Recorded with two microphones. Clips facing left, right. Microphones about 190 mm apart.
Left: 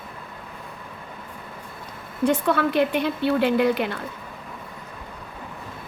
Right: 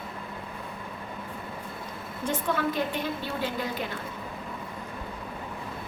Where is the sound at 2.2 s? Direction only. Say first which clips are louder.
Left 7 dB; 70° left (ahead or behind).